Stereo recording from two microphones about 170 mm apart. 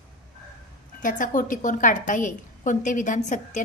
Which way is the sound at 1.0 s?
50° left (ahead or behind).